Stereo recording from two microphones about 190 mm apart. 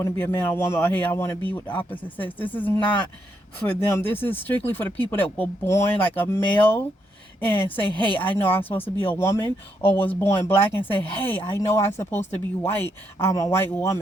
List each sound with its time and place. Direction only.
0.0 s speech: 10° left (ahead or behind)
7.8 s speech: 30° left (ahead or behind)
8.2 s speech: 10° left (ahead or behind)